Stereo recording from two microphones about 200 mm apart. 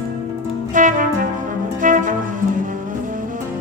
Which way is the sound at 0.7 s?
40° right (ahead or behind).